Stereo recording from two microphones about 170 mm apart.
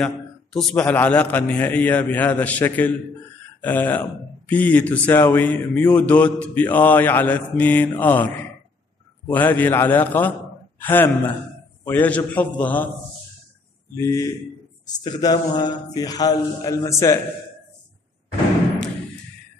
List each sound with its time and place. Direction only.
0.0 s a man's voice: 5° left (ahead or behind)
13.9 s a man's voice: 20° left (ahead or behind)